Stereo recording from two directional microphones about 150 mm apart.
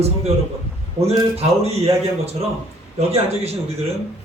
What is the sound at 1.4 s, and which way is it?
Speech, 45° right (ahead or behind).